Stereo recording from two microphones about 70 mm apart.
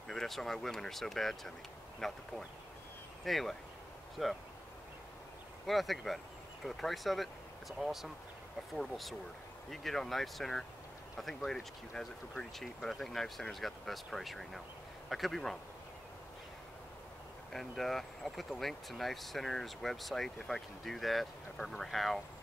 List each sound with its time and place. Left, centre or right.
0.1 s speech: centre
5.7 s speech: centre
17.5 s speech: centre